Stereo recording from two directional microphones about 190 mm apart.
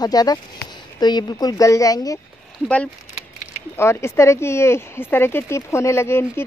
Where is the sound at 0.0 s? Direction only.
20° left (ahead or behind).